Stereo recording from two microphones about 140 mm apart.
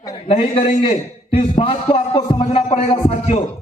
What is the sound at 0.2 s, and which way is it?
A man's voice, 40° left (ahead or behind).